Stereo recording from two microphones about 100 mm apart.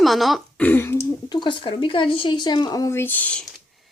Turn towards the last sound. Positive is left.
turn(degrees=15)  # may be behind; listen again after turning